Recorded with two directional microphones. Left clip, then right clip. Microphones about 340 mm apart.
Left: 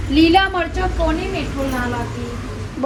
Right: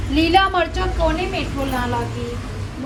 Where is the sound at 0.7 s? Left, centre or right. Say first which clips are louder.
Even; centre.